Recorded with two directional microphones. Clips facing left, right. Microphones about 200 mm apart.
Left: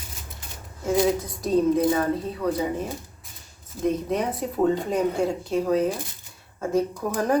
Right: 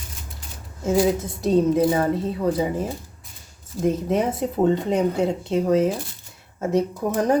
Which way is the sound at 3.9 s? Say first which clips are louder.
Right 3 dB; 25° right (ahead or behind).